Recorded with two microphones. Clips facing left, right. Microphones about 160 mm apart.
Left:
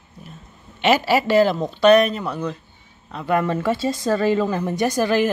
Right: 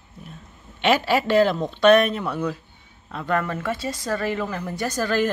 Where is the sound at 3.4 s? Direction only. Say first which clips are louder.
Left 6 dB; 25° left (ahead or behind).